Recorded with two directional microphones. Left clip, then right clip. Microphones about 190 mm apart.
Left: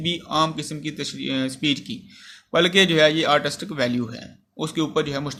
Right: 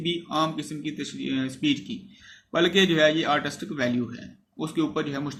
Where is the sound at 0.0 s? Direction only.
55° left (ahead or behind).